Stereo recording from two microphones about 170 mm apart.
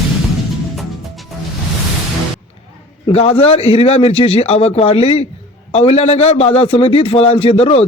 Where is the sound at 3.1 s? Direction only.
35° left (ahead or behind).